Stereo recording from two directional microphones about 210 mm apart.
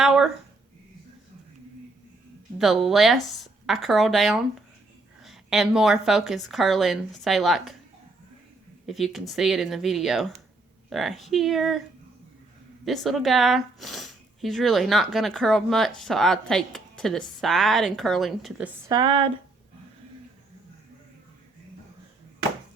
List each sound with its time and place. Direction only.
0.0 s a sound: centre (ahead or behind)
2.6 s speech: centre (ahead or behind)
8.9 s speech: centre (ahead or behind)
12.8 s speech: centre (ahead or behind)
18.9 s speech: 20° right (ahead or behind)